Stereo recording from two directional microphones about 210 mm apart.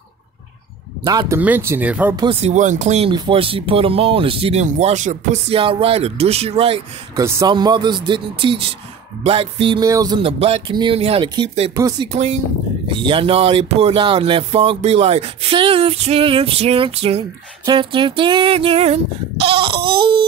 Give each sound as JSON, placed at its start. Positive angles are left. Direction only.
{"t": 1.0, "sound": "speech", "side_deg": -15}
{"t": 2.1, "sound": "speech", "side_deg": -30}
{"t": 11.7, "sound": "speech", "side_deg": -15}
{"t": 12.1, "sound": "speech", "side_deg": -30}